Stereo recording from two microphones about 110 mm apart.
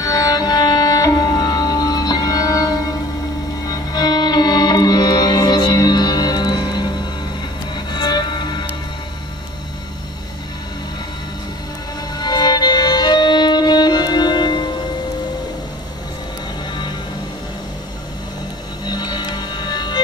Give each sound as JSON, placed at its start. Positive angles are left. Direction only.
{"t": 0.0, "sound": "music", "side_deg": 35}
{"t": 12.2, "sound": "violin", "side_deg": 40}
{"t": 18.9, "sound": "music", "side_deg": 40}